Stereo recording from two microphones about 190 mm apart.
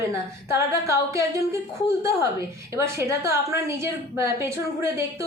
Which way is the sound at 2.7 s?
15° right (ahead or behind).